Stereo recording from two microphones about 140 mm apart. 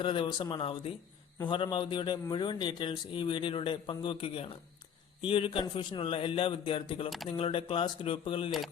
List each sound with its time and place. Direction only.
0.0 s a man's voice: 35° left (ahead or behind)